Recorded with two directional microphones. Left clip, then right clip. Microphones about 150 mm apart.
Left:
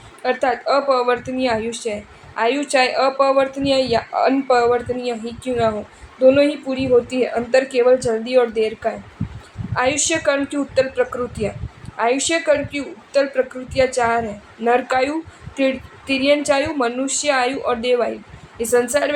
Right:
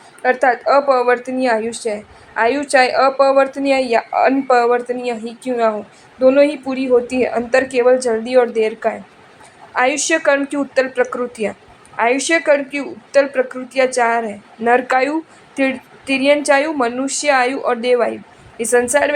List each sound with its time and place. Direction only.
0.2 s a woman's voice: 25° right (ahead or behind)